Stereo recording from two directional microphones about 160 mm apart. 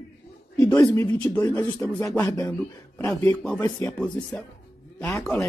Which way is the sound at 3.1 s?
5° left (ahead or behind).